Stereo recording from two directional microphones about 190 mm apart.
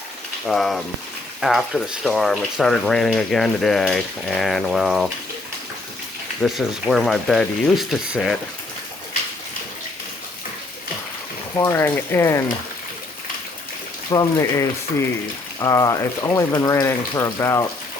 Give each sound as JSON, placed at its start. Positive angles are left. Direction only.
{"t": 0.4, "sound": "speech", "side_deg": 0}
{"t": 6.4, "sound": "speech", "side_deg": 0}
{"t": 11.5, "sound": "speech", "side_deg": 15}
{"t": 14.1, "sound": "speech", "side_deg": 20}